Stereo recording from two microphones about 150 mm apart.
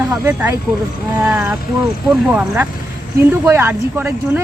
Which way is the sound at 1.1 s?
10° right (ahead or behind).